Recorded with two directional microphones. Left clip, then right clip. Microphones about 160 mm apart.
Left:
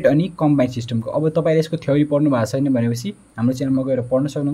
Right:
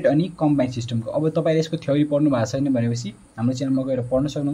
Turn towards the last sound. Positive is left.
turn(degrees=25)  # may be behind; listen again after turning